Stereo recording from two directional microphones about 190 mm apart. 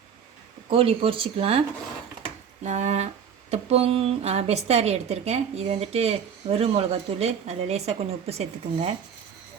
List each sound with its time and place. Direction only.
0.7 s speech: 30° right (ahead or behind)
2.6 s a woman's voice: 40° right (ahead or behind)